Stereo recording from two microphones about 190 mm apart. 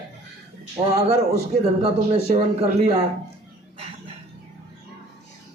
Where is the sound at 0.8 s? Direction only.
25° right (ahead or behind).